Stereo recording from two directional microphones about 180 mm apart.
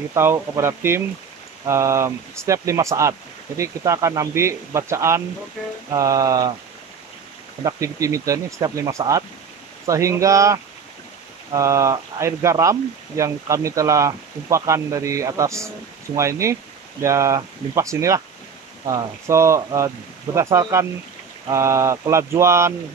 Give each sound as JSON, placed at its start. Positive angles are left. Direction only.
{"t": 0.1, "sound": "speech", "side_deg": -15}
{"t": 5.9, "sound": "mantra", "side_deg": -20}
{"t": 7.6, "sound": "speech", "side_deg": -15}